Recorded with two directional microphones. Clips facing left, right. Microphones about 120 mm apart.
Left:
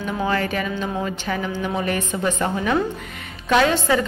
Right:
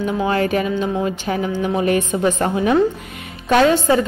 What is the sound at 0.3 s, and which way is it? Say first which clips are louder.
Speech: right 5 dB; 35° right (ahead or behind).